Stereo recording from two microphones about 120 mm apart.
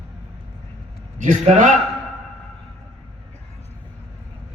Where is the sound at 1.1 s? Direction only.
90° right.